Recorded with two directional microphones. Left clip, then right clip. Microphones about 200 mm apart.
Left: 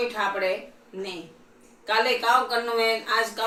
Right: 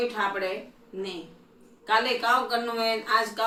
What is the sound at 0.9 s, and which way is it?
Speech, 20° right (ahead or behind).